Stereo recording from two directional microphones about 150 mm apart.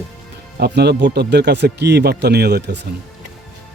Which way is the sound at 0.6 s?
90° right.